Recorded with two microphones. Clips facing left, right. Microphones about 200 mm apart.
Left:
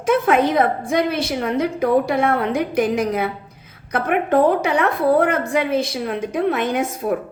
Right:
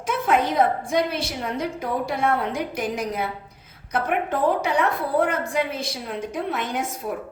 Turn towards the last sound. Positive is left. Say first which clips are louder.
# left 7 dB
turn(degrees=70)  # may be behind; listen again after turning